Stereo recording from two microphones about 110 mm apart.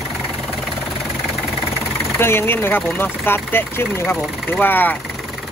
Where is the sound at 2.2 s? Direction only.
20° left (ahead or behind).